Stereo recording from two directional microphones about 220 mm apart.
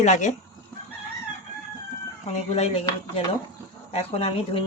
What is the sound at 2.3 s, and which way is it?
Speech, 30° left (ahead or behind).